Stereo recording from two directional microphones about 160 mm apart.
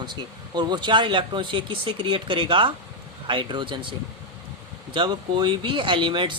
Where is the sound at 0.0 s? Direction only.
25° right (ahead or behind).